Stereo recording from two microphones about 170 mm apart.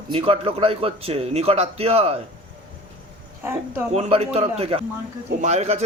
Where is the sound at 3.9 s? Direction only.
40° right (ahead or behind).